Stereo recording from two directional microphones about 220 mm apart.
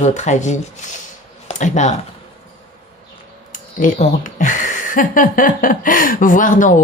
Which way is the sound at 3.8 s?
35° left (ahead or behind).